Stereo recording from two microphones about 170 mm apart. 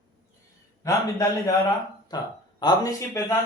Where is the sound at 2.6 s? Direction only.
20° left (ahead or behind).